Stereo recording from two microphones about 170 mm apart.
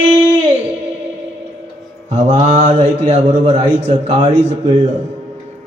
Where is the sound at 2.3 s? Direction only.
35° right (ahead or behind).